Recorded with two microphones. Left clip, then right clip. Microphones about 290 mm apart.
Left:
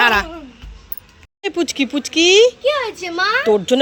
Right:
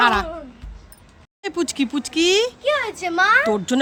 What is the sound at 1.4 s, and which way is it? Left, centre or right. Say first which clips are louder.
Speech: left 4 dB; centre.